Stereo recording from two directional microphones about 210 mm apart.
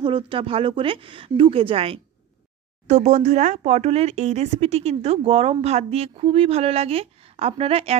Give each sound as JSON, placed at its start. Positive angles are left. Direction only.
{"t": 0.0, "sound": "speech", "side_deg": -25}